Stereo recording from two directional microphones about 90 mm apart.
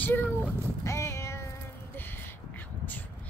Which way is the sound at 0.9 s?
30° left (ahead or behind).